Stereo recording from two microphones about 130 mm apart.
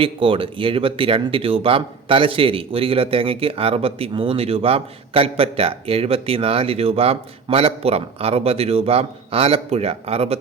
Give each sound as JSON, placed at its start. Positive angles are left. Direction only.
{"t": 0.0, "sound": "speech", "side_deg": -45}